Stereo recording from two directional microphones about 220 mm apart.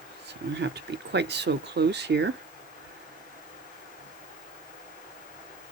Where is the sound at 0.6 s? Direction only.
50° right (ahead or behind).